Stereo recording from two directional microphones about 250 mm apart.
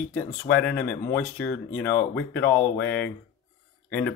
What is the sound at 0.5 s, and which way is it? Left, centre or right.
Speech, centre.